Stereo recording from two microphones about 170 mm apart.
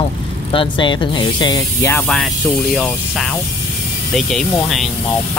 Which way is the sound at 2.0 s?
Centre (ahead or behind).